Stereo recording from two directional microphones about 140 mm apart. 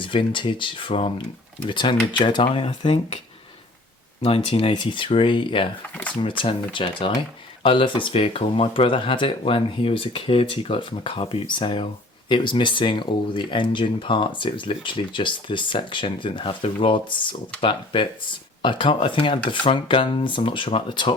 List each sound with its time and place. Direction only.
0.0 s speech: 35° left (ahead or behind)
4.2 s speech: 40° left (ahead or behind)
5.9 s a sound: 10° left (ahead or behind)
6.1 s speech: 35° left (ahead or behind)